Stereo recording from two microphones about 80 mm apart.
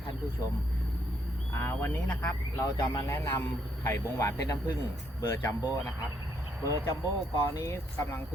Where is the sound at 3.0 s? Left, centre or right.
Left.